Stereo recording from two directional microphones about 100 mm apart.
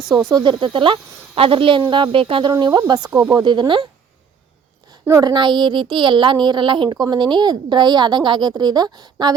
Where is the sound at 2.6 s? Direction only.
45° right (ahead or behind).